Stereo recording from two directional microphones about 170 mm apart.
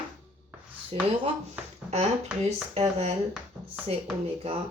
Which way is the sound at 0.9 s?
35° right (ahead or behind).